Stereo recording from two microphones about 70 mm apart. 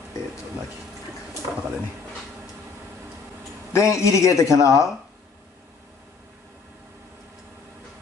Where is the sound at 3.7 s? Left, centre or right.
Left.